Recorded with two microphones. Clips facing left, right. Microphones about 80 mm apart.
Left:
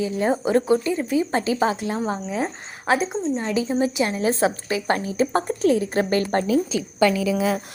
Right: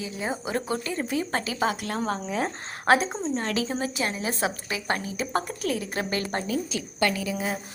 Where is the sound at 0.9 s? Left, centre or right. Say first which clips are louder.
Left 6 dB; centre.